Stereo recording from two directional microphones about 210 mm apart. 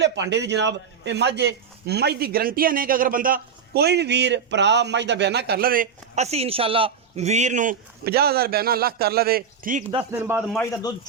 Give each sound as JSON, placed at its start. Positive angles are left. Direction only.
{"t": 0.0, "sound": "a man's voice", "side_deg": -55}
{"t": 10.0, "sound": "speech", "side_deg": -10}